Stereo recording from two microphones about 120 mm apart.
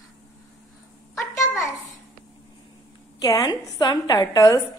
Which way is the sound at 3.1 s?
30° left (ahead or behind).